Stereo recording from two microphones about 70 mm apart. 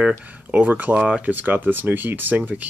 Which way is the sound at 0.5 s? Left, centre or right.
Right.